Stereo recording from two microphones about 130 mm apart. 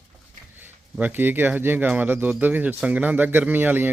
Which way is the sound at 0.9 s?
15° right (ahead or behind).